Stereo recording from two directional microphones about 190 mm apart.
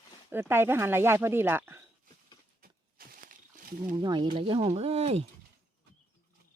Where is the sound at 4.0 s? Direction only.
25° right (ahead or behind).